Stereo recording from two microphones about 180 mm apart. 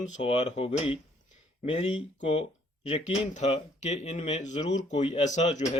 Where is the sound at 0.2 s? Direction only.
35° left (ahead or behind).